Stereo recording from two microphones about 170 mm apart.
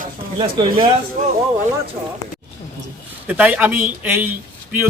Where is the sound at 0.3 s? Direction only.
30° right (ahead or behind).